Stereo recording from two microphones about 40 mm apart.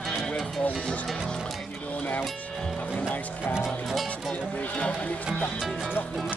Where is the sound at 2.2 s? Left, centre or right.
Centre.